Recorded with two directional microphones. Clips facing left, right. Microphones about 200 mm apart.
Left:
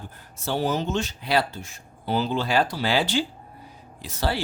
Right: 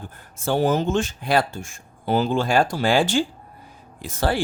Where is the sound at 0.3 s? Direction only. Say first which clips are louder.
Right 5 dB; 50° right (ahead or behind).